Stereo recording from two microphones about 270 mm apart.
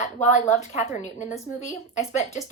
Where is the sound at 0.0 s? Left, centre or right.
Left.